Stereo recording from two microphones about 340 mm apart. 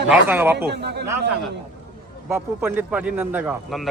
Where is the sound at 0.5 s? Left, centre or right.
Right.